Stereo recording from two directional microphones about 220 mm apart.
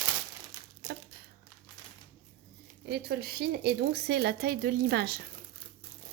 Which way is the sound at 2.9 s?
45° right (ahead or behind).